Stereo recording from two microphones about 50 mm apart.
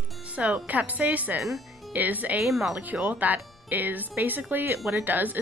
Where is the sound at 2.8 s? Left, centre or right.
Right.